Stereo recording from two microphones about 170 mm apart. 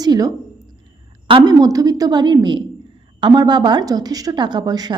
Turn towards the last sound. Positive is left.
turn(degrees=-25)  # may be behind; listen again after turning